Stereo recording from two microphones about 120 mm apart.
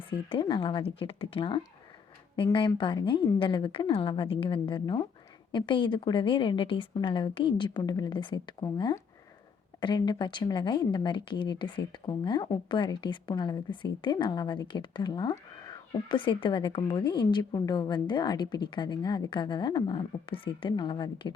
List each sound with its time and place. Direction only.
0.1 s a woman's voice: 45° left (ahead or behind)
16.1 s a woman's voice: 45° left (ahead or behind)